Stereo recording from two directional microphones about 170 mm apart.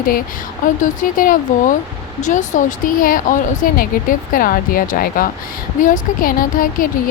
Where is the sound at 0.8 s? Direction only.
50° left (ahead or behind).